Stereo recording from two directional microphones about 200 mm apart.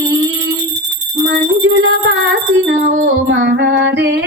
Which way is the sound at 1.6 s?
80° right.